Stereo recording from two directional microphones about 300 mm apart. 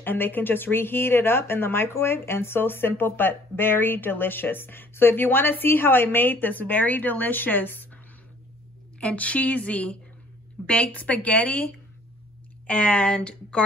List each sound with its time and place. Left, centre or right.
0.0 s speech: centre
9.0 s a woman's voice: centre
12.6 s speech: centre